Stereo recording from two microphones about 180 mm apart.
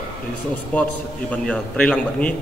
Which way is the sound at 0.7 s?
10° left (ahead or behind).